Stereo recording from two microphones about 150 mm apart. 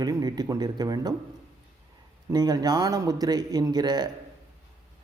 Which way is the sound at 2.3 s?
25° right (ahead or behind).